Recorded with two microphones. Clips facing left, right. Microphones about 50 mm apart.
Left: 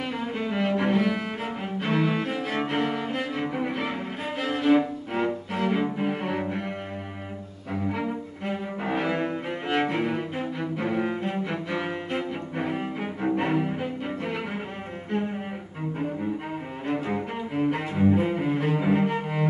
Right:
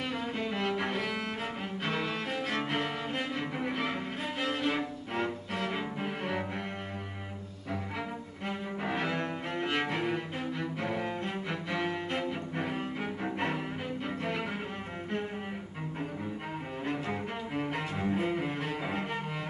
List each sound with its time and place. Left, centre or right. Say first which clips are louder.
0.0 s cello: left 4 dB; centre
8.0 s cello: left 7 dB; centre
16.9 s cello: left 9 dB; centre